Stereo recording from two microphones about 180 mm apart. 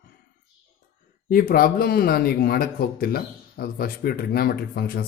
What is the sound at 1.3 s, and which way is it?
Speech, 55° left (ahead or behind).